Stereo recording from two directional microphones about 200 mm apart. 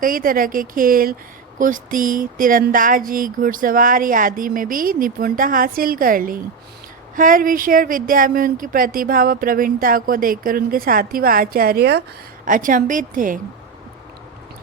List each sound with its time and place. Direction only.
0.0 s speech: 45° right (ahead or behind)
12.5 s a woman's voice: 40° right (ahead or behind)